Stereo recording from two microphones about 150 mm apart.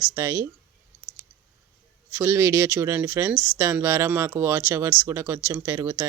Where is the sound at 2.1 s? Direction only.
15° right (ahead or behind).